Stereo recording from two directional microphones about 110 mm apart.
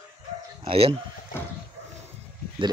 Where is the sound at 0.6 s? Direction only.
60° right (ahead or behind).